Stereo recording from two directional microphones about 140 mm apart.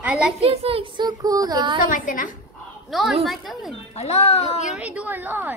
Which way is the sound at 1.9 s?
75° left (ahead or behind).